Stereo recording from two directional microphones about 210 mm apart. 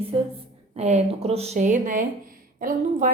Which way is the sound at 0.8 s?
30° right (ahead or behind).